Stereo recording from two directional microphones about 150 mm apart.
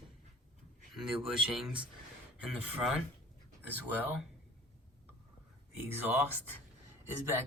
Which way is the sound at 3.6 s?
10° right (ahead or behind).